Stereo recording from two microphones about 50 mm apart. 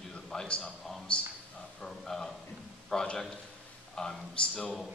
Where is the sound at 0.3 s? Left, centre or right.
Centre.